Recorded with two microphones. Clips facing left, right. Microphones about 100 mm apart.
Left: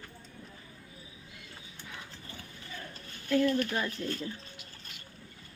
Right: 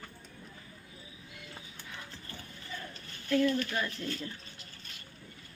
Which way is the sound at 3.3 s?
5° left (ahead or behind).